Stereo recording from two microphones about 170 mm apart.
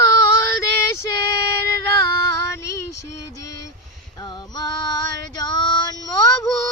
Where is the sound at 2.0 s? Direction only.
20° left (ahead or behind).